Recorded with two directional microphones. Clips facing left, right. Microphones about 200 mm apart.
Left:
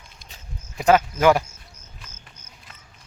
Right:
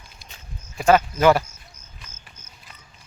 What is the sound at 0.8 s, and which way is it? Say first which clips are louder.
Speech: even; 15° left (ahead or behind).